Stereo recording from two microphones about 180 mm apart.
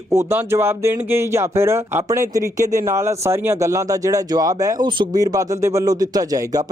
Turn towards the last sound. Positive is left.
turn(degrees=-20)  # may be behind; listen again after turning